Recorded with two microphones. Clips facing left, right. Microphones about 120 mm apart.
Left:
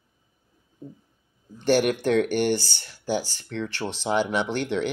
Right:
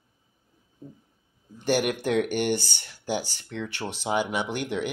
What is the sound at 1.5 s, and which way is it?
Speech, 15° right (ahead or behind).